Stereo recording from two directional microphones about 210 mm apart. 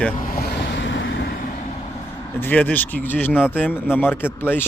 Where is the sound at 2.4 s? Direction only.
10° left (ahead or behind).